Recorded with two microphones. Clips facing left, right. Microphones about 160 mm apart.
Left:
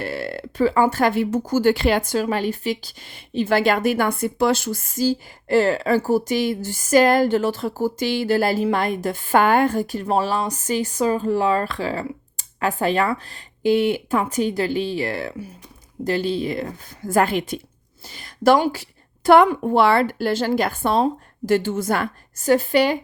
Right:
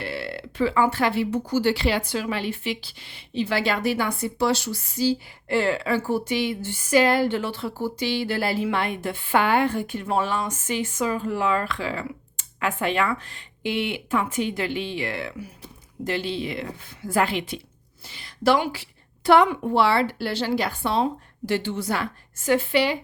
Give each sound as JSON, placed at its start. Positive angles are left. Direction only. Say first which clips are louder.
{"t": 0.0, "sound": "a woman's voice", "louder": "left 4 dB", "side_deg": 45}